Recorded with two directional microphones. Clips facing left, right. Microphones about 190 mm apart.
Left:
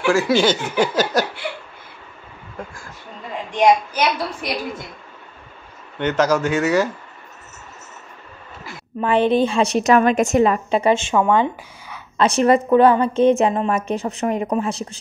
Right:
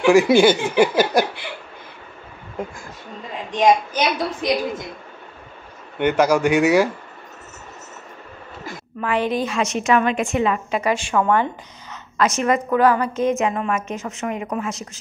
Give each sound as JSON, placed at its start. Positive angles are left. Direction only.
{"t": 0.0, "sound": "speech", "side_deg": -15}
{"t": 2.6, "sound": "a woman's voice", "side_deg": -20}
{"t": 3.9, "sound": "a woman's voice", "side_deg": -20}
{"t": 5.9, "sound": "speech", "side_deg": -10}
{"t": 9.0, "sound": "a woman's voice", "side_deg": 30}
{"t": 10.7, "sound": "speech", "side_deg": 25}
{"t": 12.2, "sound": "a woman's voice", "side_deg": 35}